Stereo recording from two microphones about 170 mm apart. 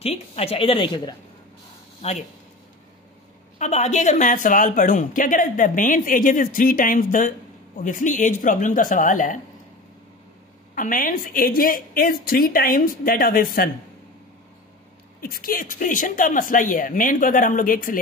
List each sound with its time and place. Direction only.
0.0 s a woman's voice: 35° left (ahead or behind)
2.0 s speech: 40° left (ahead or behind)
3.5 s speech: 45° left (ahead or behind)
10.7 s a woman's voice: 55° left (ahead or behind)
15.1 s speech: 60° left (ahead or behind)